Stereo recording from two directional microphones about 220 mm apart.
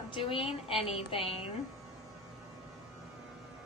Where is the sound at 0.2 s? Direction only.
25° left (ahead or behind).